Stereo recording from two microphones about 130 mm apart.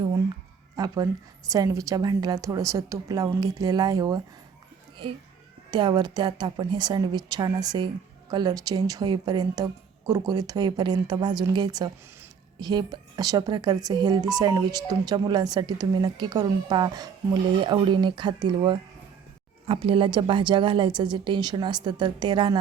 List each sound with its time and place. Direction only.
0.8 s a woman's voice: 30° right (ahead or behind)
5.7 s speech: 35° right (ahead or behind)